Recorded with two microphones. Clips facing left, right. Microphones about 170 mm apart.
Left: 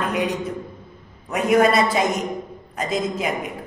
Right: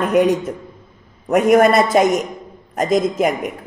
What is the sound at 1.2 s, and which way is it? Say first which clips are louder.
A woman's voice: right 5 dB; 50° right (ahead or behind).